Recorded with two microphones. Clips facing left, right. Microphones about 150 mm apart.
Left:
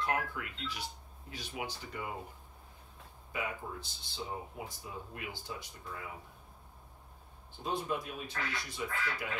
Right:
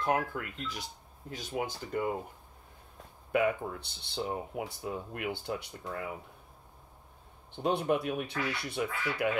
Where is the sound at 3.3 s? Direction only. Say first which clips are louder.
Right 11 dB; 65° right (ahead or behind).